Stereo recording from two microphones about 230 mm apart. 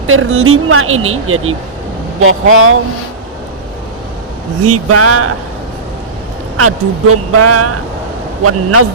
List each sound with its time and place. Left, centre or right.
0.1 s speech: right
4.6 s speech: right
6.6 s a man's voice: right